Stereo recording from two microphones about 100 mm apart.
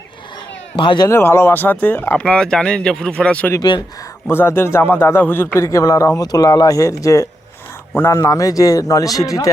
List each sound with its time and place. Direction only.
0.8 s a man's voice: 55° left (ahead or behind)
1.0 s speech: 25° left (ahead or behind)
2.1 s speech: 10° left (ahead or behind)
3.6 s speech: 45° left (ahead or behind)
4.3 s speech: 25° left (ahead or behind)
5.5 s a man's voice: 30° left (ahead or behind)